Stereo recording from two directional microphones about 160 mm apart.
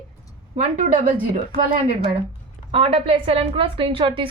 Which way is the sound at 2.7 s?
35° right (ahead or behind).